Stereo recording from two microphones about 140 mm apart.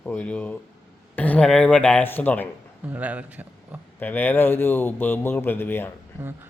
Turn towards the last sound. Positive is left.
turn(degrees=-15)  # may be behind; listen again after turning